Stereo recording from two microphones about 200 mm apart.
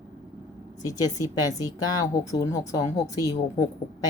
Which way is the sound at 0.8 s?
20° left (ahead or behind).